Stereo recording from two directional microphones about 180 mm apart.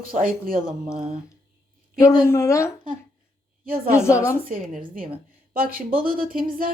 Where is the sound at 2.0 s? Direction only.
15° left (ahead or behind).